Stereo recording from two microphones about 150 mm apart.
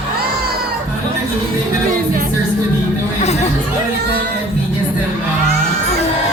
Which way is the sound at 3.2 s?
45° left (ahead or behind).